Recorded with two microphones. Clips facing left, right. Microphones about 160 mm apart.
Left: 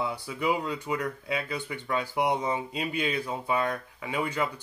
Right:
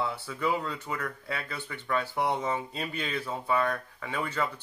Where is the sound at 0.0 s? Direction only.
15° left (ahead or behind).